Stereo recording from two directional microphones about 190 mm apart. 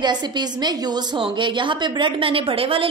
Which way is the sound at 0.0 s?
20° right (ahead or behind).